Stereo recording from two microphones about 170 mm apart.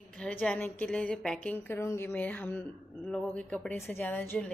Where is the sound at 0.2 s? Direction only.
5° left (ahead or behind).